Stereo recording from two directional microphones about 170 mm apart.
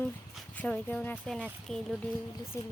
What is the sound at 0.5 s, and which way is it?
Speech, 10° left (ahead or behind).